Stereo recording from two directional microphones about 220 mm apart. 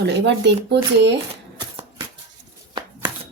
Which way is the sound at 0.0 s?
50° right (ahead or behind).